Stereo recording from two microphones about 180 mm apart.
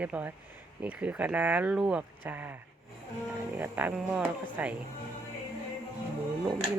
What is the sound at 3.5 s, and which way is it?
Speech, 10° right (ahead or behind).